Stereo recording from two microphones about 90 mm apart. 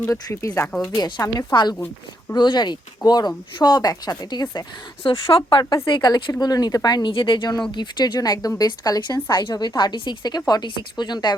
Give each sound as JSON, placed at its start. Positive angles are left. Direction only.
{"t": 0.1, "sound": "speech", "side_deg": 35}
{"t": 0.9, "sound": "speech", "side_deg": 50}
{"t": 5.3, "sound": "speech", "side_deg": 65}
{"t": 5.6, "sound": "speech", "side_deg": 35}
{"t": 5.9, "sound": "speech", "side_deg": 60}
{"t": 6.4, "sound": "speech", "side_deg": 45}
{"t": 7.1, "sound": "speech", "side_deg": 70}
{"t": 7.7, "sound": "speech", "side_deg": 55}